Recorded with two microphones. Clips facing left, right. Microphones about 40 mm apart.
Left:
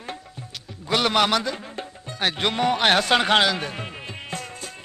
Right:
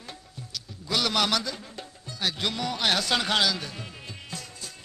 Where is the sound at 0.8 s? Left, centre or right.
Left.